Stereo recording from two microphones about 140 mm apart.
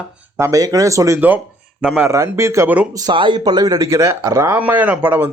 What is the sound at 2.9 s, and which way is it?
Speech, 30° right (ahead or behind).